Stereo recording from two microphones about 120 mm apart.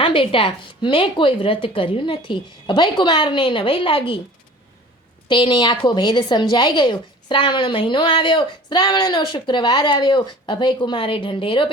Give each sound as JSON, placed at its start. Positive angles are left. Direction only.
{"t": 0.0, "sound": "speech", "side_deg": 50}
{"t": 5.3, "sound": "a woman's voice", "side_deg": 40}